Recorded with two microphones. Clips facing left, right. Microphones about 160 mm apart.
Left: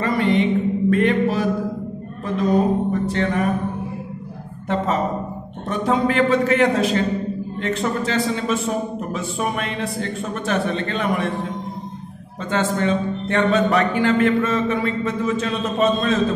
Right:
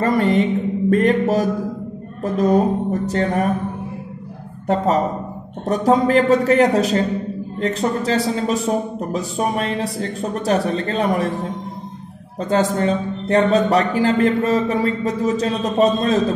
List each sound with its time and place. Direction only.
0.0 s a man's voice: 45° right (ahead or behind)
2.2 s a sound: 45° right (ahead or behind)
4.6 s a man's voice: 40° right (ahead or behind)